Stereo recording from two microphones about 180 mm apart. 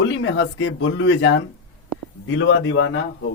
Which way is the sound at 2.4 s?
90° left.